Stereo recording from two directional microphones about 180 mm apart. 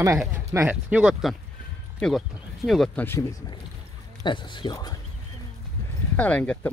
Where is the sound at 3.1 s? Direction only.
15° left (ahead or behind).